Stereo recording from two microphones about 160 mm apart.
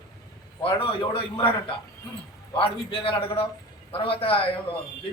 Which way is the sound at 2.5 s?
35° left (ahead or behind).